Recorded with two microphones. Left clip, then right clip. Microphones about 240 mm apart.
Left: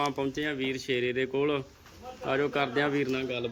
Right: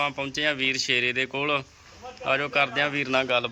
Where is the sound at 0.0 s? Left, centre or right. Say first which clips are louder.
Right 4 dB; centre.